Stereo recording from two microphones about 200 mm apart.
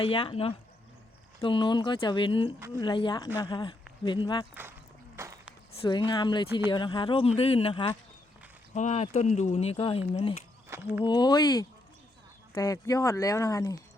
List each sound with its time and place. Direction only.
0.1 s speech: 25° left (ahead or behind)
5.1 s walk: 15° right (ahead or behind)
6.1 s speech: 25° left (ahead or behind)
10.7 s speech: 10° right (ahead or behind)
11.0 s speech: 20° left (ahead or behind)